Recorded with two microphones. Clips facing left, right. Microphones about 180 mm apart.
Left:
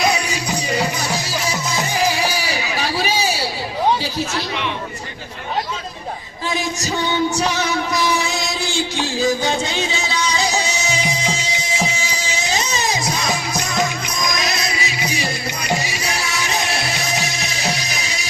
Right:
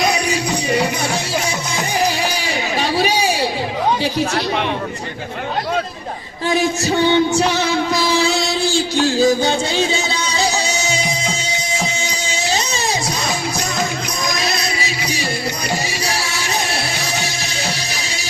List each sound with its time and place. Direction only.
7.3 s music: 30° right (ahead or behind)